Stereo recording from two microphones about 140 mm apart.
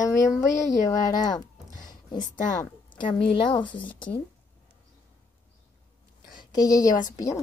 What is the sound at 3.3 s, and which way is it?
Speech, 35° left (ahead or behind).